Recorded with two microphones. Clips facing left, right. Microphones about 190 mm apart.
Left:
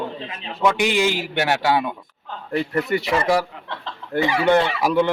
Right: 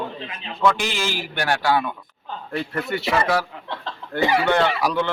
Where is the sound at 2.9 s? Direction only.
5° left (ahead or behind).